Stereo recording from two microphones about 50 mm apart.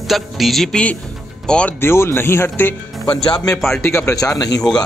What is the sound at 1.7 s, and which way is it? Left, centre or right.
A man's voice, left.